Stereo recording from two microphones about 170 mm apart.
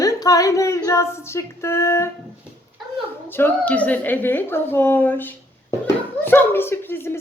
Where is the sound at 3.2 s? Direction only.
10° left (ahead or behind).